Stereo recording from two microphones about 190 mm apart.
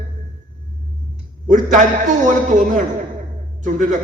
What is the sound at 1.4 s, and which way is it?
A man's voice, 40° right (ahead or behind).